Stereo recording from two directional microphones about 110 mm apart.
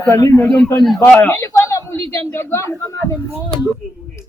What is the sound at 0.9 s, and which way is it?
A man's voice, 20° left (ahead or behind).